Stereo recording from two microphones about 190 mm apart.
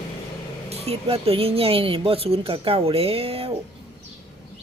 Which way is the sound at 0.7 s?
30° right (ahead or behind).